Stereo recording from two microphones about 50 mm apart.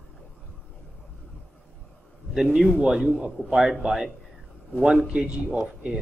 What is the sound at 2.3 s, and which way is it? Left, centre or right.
A man's voice, centre.